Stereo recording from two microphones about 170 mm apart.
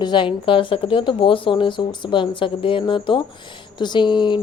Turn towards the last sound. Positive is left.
turn(degrees=25)  # may be behind; listen again after turning